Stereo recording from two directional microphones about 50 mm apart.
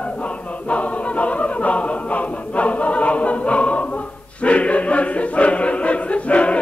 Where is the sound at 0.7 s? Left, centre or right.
Left.